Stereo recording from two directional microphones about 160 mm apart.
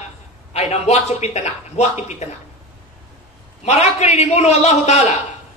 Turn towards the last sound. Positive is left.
turn(degrees=45)  # may be behind; listen again after turning